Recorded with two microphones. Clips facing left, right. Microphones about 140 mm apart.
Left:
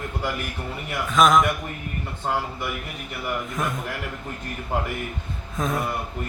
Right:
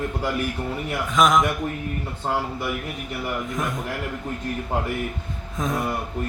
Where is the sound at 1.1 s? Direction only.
15° right (ahead or behind).